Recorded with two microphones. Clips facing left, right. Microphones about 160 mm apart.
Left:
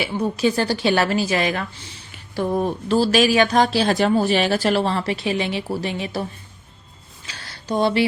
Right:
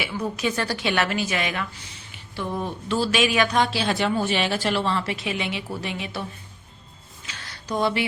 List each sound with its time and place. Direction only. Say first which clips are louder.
0.0 s speech: left 6 dB; 30° left (ahead or behind)
2.3 s speech: left 7 dB; 45° left (ahead or behind)
7.3 s a sound: left 4 dB; 35° left (ahead or behind)